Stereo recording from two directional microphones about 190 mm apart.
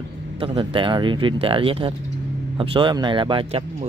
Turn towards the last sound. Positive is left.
turn(degrees=-25)  # may be behind; listen again after turning